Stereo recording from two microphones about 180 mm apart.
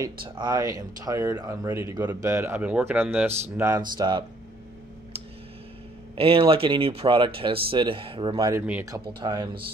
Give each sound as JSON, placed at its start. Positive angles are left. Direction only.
{"t": 0.0, "sound": "speech", "side_deg": -25}
{"t": 6.1, "sound": "speech", "side_deg": -30}